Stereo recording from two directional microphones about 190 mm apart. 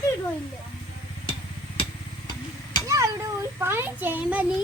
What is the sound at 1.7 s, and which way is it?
Vehicle, 30° left (ahead or behind).